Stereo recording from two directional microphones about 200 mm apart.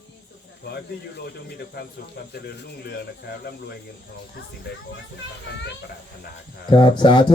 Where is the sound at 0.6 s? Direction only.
55° left (ahead or behind).